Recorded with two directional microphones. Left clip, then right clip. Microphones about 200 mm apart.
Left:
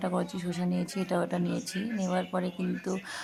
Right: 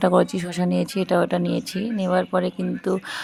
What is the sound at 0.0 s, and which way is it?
Speech, 45° right (ahead or behind).